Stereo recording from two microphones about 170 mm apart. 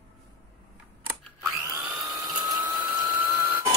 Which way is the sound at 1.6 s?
15° right (ahead or behind).